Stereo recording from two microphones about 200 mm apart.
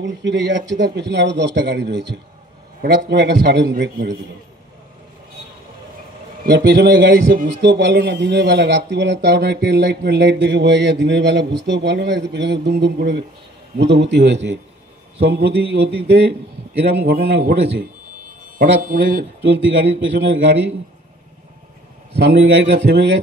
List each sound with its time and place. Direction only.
0.0 s a man's voice: 65° right (ahead or behind)
6.4 s a man's voice: 55° right (ahead or behind)
19.8 s a man's voice: 55° right (ahead or behind)
22.1 s a man's voice: 55° right (ahead or behind)